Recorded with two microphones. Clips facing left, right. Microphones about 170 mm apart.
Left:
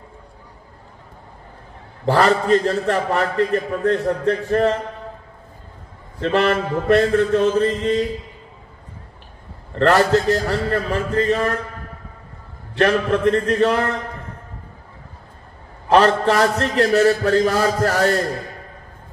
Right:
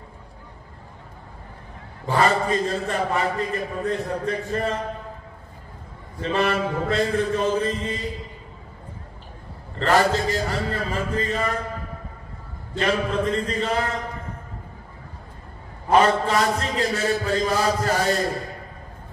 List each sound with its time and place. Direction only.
2.0 s a man's voice: 75° left (ahead or behind)
6.2 s a man's voice: 65° left (ahead or behind)
9.8 s a man's voice: 70° left (ahead or behind)
12.7 s a man's voice: 75° left (ahead or behind)
15.9 s a man's voice: 70° left (ahead or behind)